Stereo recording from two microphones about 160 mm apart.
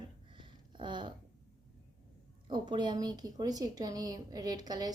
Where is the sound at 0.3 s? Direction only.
30° right (ahead or behind).